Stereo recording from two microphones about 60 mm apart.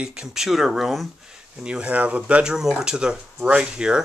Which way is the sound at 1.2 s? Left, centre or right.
Centre.